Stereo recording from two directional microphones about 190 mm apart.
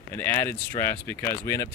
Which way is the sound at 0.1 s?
10° left (ahead or behind).